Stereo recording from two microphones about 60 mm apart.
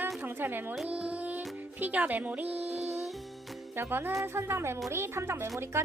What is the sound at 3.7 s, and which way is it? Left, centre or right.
A woman's voice, right.